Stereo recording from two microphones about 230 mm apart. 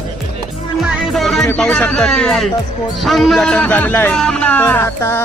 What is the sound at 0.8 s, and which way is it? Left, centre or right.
Music, centre.